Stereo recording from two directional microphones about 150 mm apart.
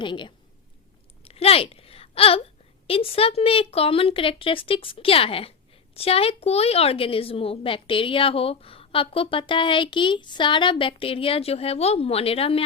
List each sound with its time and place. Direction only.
0.0 s speech: 30° left (ahead or behind)
1.2 s a sound: 40° left (ahead or behind)
2.8 s speech: 40° left (ahead or behind)